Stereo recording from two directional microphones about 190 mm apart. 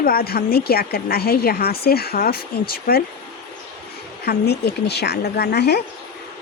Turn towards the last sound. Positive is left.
turn(degrees=60)  # may be behind; listen again after turning